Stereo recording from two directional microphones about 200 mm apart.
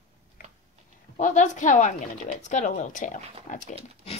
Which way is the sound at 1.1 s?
40° left (ahead or behind).